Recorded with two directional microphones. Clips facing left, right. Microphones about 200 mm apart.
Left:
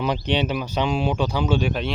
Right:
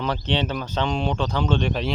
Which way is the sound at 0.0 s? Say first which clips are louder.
Left 2 dB; 15° left (ahead or behind).